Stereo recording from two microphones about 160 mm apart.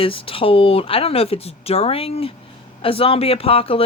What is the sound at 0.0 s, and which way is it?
Speech, 35° left (ahead or behind).